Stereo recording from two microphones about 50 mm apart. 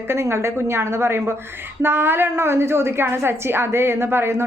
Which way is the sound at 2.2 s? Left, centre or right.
Right.